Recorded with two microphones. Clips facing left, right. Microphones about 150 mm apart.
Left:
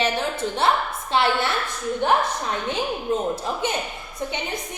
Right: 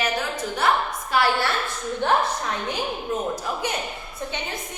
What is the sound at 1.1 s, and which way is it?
A woman's voice, 25° left (ahead or behind).